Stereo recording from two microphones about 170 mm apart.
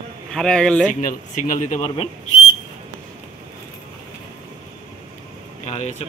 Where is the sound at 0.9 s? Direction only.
50° left (ahead or behind).